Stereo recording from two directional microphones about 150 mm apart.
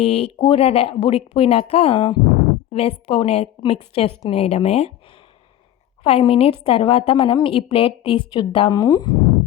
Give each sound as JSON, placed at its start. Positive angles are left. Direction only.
{"t": 0.0, "sound": "a woman's voice", "side_deg": 40}
{"t": 6.0, "sound": "a woman's voice", "side_deg": 40}